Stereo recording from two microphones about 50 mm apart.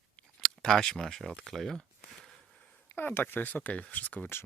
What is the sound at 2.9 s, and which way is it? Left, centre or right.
Speech, left.